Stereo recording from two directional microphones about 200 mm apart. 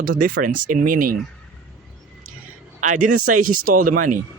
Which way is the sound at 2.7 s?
40° right (ahead or behind).